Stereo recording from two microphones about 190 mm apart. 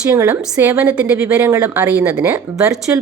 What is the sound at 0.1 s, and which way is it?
A woman's voice, 15° right (ahead or behind).